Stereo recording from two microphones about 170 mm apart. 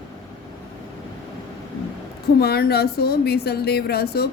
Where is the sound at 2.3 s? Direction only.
65° left (ahead or behind).